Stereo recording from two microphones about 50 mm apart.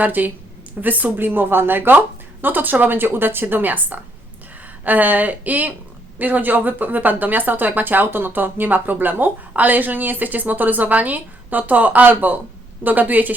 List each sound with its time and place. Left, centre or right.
0.0 s speech: right